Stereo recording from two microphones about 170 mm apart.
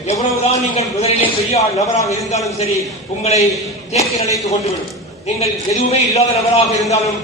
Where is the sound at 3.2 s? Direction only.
40° left (ahead or behind).